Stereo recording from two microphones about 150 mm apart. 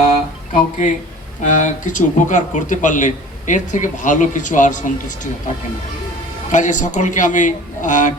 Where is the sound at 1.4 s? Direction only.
55° left (ahead or behind).